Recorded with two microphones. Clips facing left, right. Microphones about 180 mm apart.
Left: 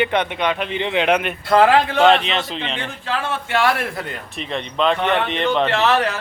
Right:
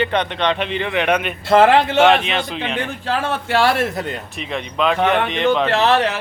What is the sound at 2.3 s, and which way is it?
Speech, centre (ahead or behind).